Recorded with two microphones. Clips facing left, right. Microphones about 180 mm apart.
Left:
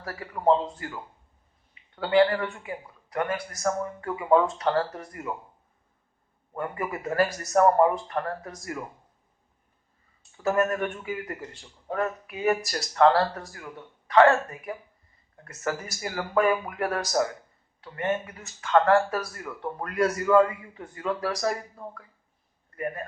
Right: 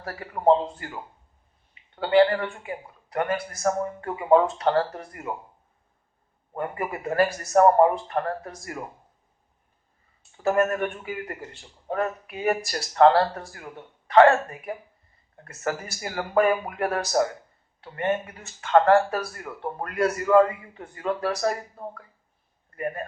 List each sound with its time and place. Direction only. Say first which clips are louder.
0.0 s a man's voice: right 3 dB; 30° right (ahead or behind)
6.5 s speech: right 1 dB; 30° right (ahead or behind)
10.3 s speech: right 2 dB; 30° right (ahead or behind)